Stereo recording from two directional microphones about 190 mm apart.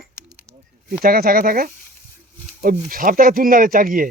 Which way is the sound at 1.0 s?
50° right (ahead or behind).